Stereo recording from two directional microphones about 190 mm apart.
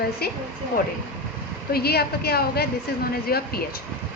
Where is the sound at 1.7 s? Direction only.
55° left (ahead or behind).